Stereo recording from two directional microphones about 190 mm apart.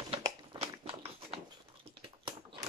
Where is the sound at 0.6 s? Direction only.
30° right (ahead or behind).